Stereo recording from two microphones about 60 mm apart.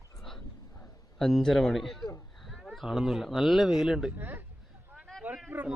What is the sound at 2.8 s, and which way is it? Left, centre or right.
Speech, centre.